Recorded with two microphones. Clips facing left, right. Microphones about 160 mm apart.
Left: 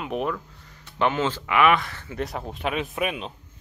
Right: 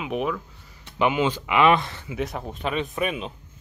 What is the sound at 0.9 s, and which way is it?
Speech, 15° right (ahead or behind).